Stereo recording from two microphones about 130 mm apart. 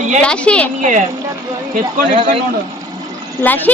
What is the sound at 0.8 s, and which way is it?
Speech, 75° right (ahead or behind).